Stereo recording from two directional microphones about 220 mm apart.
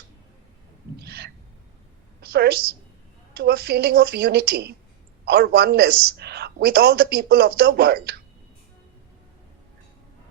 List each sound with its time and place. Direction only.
0.9 s owl: 45° right (ahead or behind)
2.2 s a woman's voice: 45° right (ahead or behind)